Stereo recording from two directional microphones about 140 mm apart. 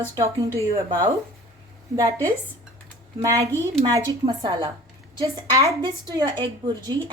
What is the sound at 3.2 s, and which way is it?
Speech, 20° right (ahead or behind).